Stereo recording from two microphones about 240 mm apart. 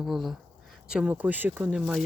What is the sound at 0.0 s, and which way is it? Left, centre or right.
Speech, centre.